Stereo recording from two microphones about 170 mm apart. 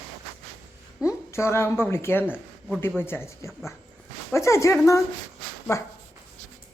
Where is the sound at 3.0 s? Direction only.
15° left (ahead or behind).